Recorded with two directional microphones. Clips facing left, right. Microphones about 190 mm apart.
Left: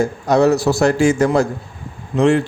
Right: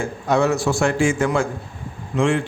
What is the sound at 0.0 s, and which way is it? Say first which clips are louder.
A man's voice: left 5 dB; 40° left (ahead or behind).